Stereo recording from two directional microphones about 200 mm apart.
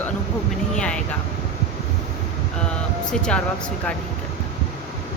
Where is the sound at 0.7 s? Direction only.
5° left (ahead or behind).